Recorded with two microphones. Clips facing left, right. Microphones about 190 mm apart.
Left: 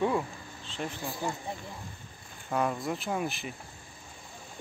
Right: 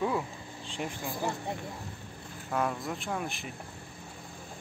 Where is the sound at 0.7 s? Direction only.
15° right (ahead or behind).